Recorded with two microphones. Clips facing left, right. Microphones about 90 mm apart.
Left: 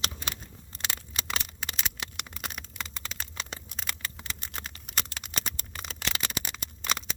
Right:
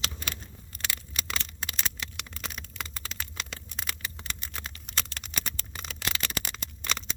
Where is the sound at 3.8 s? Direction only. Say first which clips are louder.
Right 1 dB; centre (ahead or behind).